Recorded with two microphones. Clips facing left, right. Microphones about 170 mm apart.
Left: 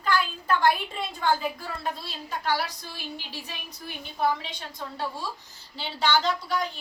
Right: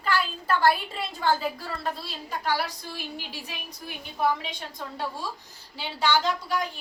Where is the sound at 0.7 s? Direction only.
5° right (ahead or behind).